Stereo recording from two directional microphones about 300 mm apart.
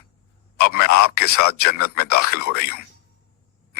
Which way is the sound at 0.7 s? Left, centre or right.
Left.